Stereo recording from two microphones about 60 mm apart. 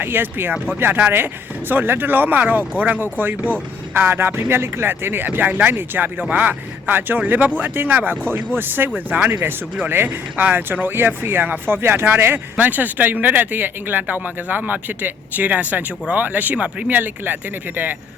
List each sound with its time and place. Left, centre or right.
0.0 s speech: right